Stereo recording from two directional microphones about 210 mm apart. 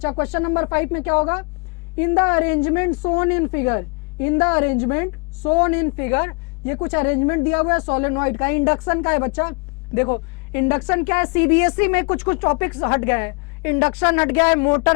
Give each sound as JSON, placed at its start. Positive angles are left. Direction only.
{"t": 0.2, "sound": "a woman's voice", "side_deg": 15}
{"t": 14.0, "sound": "speech", "side_deg": 25}
{"t": 14.3, "sound": "a woman's voice", "side_deg": 15}